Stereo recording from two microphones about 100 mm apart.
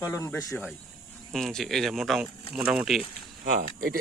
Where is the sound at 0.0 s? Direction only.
30° left (ahead or behind).